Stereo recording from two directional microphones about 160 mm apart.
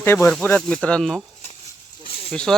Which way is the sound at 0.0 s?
15° left (ahead or behind).